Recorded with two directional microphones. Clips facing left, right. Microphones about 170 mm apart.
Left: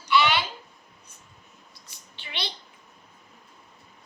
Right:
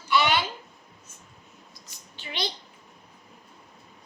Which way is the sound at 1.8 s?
45° right (ahead or behind).